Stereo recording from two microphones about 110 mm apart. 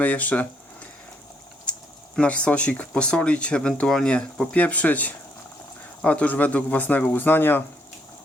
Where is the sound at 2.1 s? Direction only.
10° left (ahead or behind).